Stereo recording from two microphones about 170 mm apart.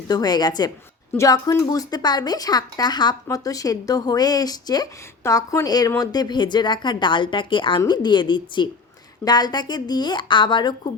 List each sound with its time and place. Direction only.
0.1 s speech: 25° left (ahead or behind)